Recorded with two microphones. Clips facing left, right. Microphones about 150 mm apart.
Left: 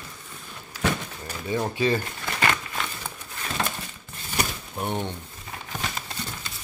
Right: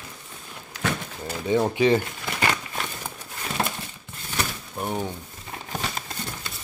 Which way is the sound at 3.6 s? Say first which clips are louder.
Right 2 dB; 35° right (ahead or behind).